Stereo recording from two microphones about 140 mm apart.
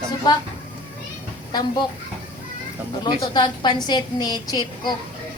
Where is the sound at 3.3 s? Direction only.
30° left (ahead or behind).